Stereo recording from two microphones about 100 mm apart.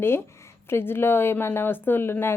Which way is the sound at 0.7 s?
25° left (ahead or behind).